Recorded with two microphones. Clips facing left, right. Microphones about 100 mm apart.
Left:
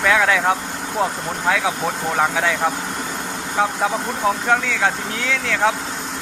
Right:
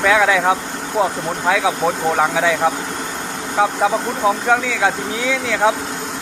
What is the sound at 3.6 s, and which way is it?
Speech, 10° right (ahead or behind).